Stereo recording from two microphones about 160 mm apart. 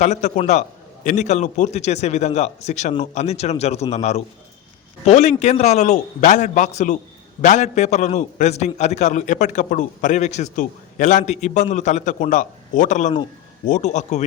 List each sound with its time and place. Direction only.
0.0 s a man's voice: 45° left (ahead or behind)